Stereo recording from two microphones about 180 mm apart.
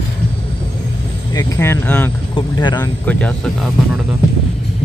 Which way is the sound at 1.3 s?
15° left (ahead or behind).